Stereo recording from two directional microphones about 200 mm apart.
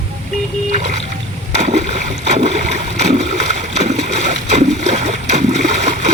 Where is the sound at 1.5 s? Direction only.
35° right (ahead or behind).